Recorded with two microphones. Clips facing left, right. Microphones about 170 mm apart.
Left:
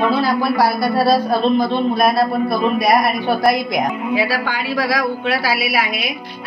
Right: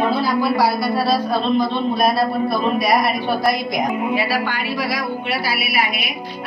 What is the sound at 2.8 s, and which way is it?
Speech, 50° left (ahead or behind).